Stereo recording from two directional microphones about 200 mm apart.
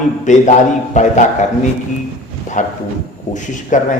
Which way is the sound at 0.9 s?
35° left (ahead or behind).